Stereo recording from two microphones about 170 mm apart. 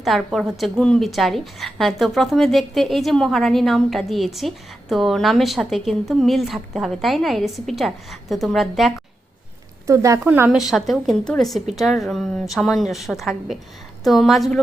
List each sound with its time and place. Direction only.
0.0 s a woman's voice: centre (ahead or behind)
9.8 s speech: 20° right (ahead or behind)
10.7 s a woman's voice: centre (ahead or behind)